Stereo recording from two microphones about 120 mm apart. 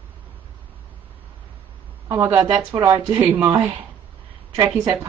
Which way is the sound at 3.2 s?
15° right (ahead or behind).